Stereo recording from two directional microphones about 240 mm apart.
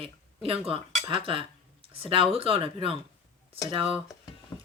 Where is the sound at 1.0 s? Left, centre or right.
Right.